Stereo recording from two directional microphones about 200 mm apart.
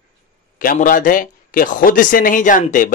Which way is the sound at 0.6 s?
45° left (ahead or behind).